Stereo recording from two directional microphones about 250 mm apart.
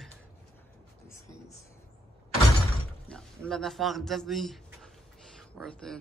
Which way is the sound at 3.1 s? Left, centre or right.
Centre.